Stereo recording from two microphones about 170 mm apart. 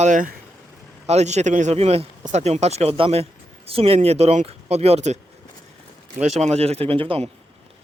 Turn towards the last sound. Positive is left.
turn(degrees=-30)  # may be behind; listen again after turning